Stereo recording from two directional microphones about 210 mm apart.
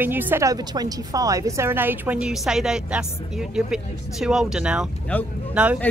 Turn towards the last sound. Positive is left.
turn(degrees=-5)  # may be behind; listen again after turning